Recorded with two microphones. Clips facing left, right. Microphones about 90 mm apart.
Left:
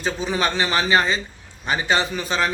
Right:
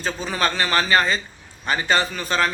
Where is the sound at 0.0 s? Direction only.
15° left (ahead or behind).